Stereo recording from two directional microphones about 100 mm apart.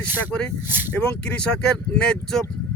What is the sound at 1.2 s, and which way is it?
Speech, 10° left (ahead or behind).